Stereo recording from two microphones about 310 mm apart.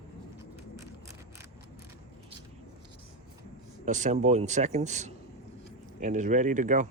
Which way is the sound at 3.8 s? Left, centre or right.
Right.